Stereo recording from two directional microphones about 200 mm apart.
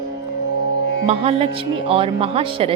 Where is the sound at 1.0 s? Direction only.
30° right (ahead or behind).